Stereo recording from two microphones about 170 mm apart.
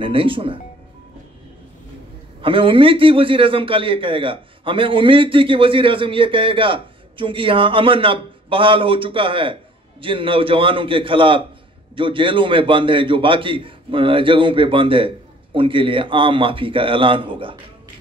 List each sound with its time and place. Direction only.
0.0 s a man's voice: 30° right (ahead or behind)
2.4 s a man's voice: 30° right (ahead or behind)